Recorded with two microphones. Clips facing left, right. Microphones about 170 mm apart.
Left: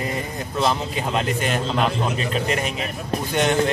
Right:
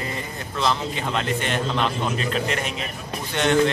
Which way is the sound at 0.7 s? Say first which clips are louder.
Left 1 dB; 10° left (ahead or behind).